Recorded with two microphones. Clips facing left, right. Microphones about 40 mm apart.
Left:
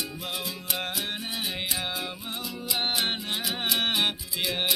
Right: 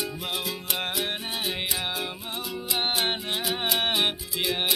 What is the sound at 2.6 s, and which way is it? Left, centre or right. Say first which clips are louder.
Music: right 1 dB; right.